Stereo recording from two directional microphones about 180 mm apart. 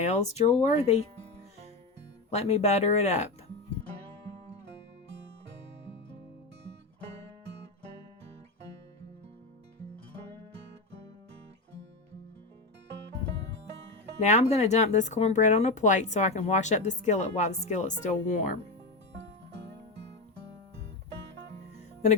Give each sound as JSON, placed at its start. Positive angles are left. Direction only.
{"t": 0.0, "sound": "speech", "side_deg": 40}
{"t": 2.3, "sound": "speech", "side_deg": 35}
{"t": 14.2, "sound": "speech", "side_deg": 40}